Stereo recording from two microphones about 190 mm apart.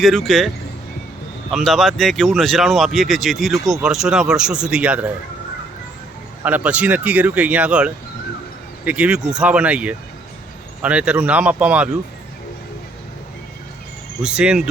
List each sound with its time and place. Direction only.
0.0 s speech: centre (ahead or behind)
6.4 s speech: 5° right (ahead or behind)
14.2 s speech: 5° right (ahead or behind)